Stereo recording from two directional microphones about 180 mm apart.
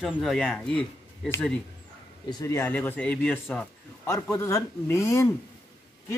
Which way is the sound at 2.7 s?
10° left (ahead or behind).